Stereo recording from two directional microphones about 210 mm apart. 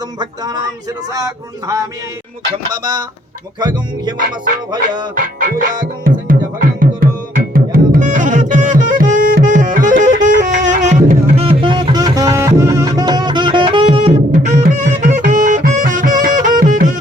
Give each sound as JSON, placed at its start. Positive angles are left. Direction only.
{"t": 0.2, "sound": "a man's voice", "side_deg": -20}
{"t": 5.1, "sound": "music", "side_deg": -40}